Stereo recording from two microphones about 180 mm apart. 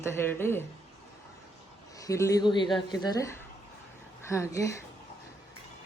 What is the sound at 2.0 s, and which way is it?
A man's voice, 15° left (ahead or behind).